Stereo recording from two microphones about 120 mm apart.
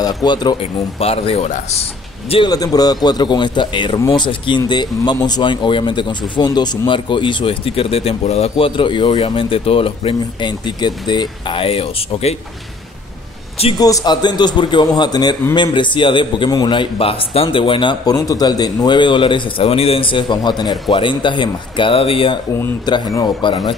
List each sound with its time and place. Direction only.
0.0 s speech: 35° left (ahead or behind)
0.6 s speech: 55° left (ahead or behind)
2.4 s speech: 30° left (ahead or behind); by 12.4 s 55° left (ahead or behind)
13.7 s speech: 30° left (ahead or behind)
18.1 s speech: 30° left (ahead or behind); by 22.4 s 50° left (ahead or behind)
23.1 s speech: 40° left (ahead or behind)